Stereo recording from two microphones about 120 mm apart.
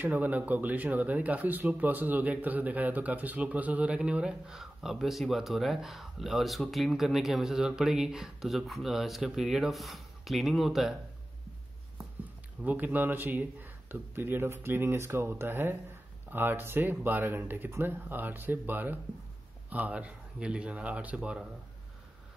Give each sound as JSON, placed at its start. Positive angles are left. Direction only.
{"t": 0.0, "sound": "speech", "side_deg": -15}
{"t": 12.6, "sound": "speech", "side_deg": -15}